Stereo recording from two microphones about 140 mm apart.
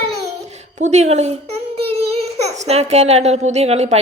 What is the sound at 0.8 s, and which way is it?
A child's voice, 55° right (ahead or behind).